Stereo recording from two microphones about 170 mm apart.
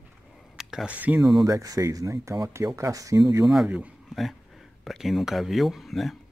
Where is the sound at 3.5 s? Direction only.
5° right (ahead or behind).